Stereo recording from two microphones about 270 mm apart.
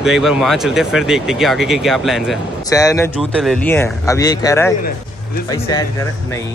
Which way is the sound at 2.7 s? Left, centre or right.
Centre.